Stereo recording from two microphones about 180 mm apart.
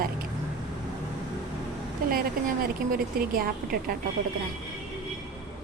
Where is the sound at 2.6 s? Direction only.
55° right (ahead or behind).